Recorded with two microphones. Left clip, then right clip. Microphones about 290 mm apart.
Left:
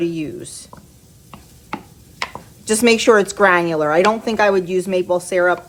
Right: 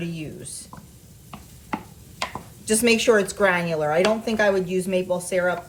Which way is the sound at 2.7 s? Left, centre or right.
Left.